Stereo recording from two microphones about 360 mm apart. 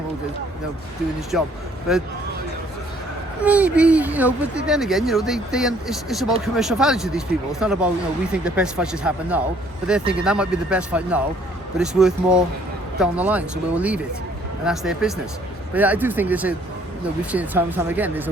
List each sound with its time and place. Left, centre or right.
3.4 s speech: centre